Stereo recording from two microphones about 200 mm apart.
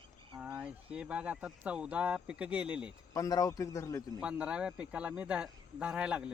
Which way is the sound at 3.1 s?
15° left (ahead or behind).